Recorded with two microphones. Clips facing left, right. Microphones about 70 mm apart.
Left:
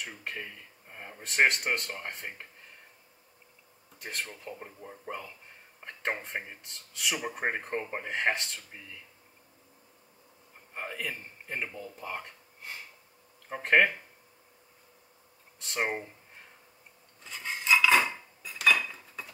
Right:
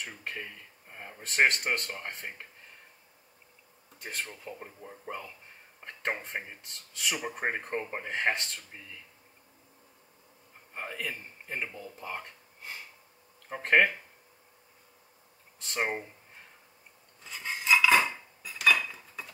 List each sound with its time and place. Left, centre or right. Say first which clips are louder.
0.0 s speech: even; centre
4.0 s speech: even; centre
10.7 s speech: even; centre
15.6 s speech: even; centre
17.2 s cutlery: even; centre